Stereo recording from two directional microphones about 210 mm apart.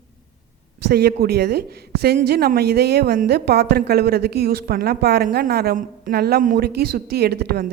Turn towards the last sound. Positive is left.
turn(degrees=-50)  # may be behind; listen again after turning